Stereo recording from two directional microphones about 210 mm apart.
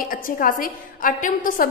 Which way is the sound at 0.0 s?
40° left (ahead or behind).